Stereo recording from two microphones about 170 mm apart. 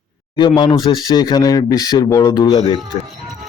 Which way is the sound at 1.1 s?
25° left (ahead or behind).